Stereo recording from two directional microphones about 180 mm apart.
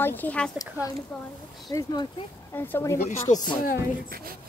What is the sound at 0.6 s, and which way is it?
Speech, 20° left (ahead or behind).